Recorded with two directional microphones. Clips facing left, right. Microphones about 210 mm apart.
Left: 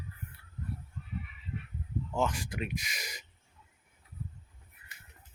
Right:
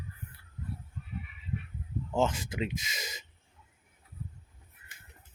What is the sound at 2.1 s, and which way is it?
Speech, 25° right (ahead or behind).